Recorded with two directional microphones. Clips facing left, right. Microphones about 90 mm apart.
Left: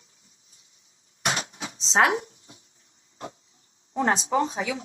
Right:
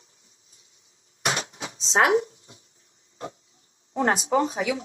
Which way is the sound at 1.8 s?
35° left (ahead or behind).